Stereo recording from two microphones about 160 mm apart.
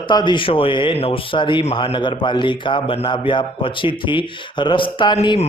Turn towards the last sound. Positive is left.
turn(degrees=30)  # may be behind; listen again after turning